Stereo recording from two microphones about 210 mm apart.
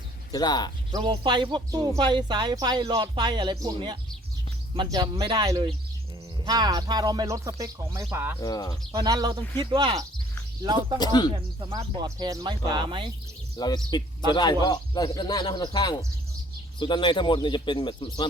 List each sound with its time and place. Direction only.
0.3 s a man's voice: 20° left (ahead or behind)
0.9 s speech: 20° right (ahead or behind)
8.4 s speech: 15° left (ahead or behind)
8.9 s speech: 20° right (ahead or behind)
10.9 s a man's voice: 20° left (ahead or behind)
11.9 s speech: 15° right (ahead or behind)
13.6 s a man's voice: 20° left (ahead or behind)